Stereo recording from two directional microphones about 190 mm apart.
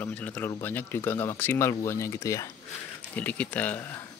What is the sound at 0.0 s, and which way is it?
Speech, 5° left (ahead or behind).